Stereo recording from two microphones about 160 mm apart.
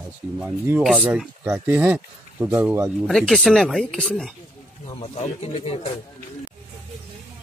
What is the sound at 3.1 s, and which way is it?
Speech, centre (ahead or behind).